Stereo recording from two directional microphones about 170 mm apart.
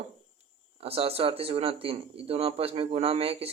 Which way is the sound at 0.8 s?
35° right (ahead or behind).